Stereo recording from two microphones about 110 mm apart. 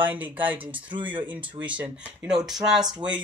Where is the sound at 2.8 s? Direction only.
40° right (ahead or behind).